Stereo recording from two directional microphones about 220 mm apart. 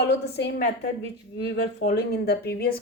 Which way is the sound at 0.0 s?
50° left (ahead or behind).